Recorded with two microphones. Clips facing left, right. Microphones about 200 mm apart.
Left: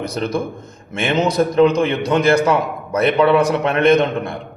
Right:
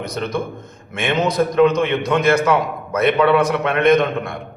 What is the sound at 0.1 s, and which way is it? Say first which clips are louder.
A man's voice: left 2 dB; 30° left (ahead or behind).